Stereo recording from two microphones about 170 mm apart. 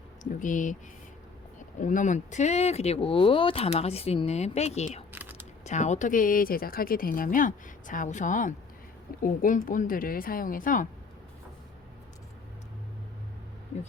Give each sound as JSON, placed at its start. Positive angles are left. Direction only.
{"t": 0.2, "sound": "speech", "side_deg": 50}
{"t": 1.8, "sound": "speech", "side_deg": 50}
{"t": 5.1, "sound": "typing", "side_deg": -10}
{"t": 5.6, "sound": "speech", "side_deg": 45}